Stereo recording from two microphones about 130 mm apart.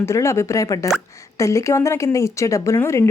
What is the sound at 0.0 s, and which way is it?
A woman's voice, 20° left (ahead or behind).